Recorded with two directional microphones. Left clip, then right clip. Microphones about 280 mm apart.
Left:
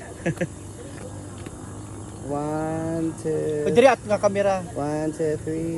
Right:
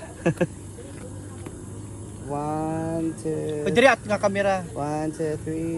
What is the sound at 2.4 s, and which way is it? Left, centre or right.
Speech, right.